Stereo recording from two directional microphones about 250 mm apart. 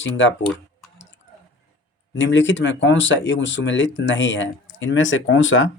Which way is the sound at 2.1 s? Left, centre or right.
Left.